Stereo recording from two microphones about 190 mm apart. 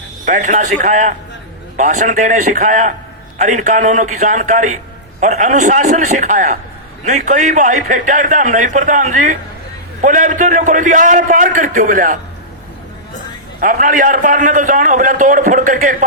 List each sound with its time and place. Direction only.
0.3 s a man's voice: 40° right (ahead or behind)
13.6 s a man's voice: 45° right (ahead or behind)